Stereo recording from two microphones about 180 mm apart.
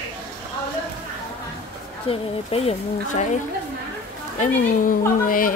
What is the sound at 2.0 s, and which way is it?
Speech, 35° left (ahead or behind).